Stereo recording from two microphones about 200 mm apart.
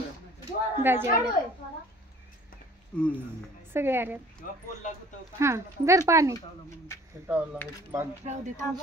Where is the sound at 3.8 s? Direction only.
10° right (ahead or behind).